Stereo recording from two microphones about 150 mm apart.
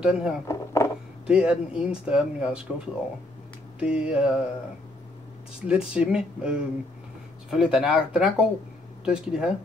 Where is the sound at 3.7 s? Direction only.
5° right (ahead or behind).